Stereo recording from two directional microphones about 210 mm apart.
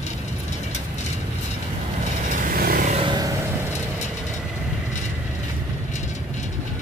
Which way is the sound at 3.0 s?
20° right (ahead or behind).